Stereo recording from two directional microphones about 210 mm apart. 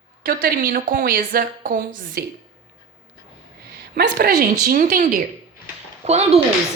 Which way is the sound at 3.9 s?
50° right (ahead or behind).